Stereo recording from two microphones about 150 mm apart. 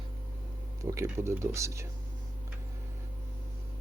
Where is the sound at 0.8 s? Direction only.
20° right (ahead or behind).